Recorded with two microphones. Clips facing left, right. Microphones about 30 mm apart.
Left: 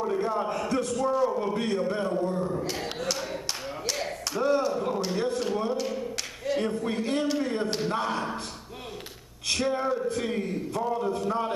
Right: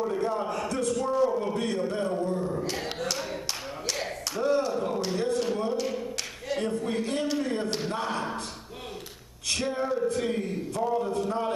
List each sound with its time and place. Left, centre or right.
0.0 s a man's voice: centre
3.8 s a sound: centre
5.9 s a capella: centre
9.6 s a man's voice: centre